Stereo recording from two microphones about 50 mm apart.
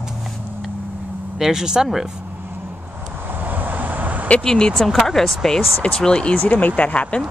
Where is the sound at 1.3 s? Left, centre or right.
Centre.